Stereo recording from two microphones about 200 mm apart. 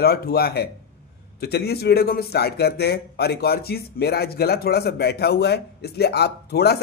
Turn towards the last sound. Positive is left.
turn(degrees=55)  # may be behind; listen again after turning